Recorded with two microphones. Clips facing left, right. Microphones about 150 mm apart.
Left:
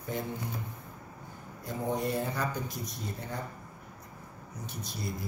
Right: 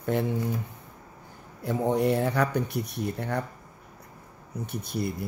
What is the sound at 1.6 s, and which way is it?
Speech, 70° right (ahead or behind).